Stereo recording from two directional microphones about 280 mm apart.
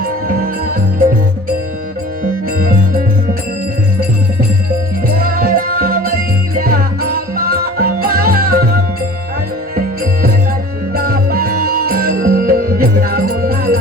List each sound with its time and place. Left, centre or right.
0.0 s music: right
2.2 s music: right
5.1 s music: right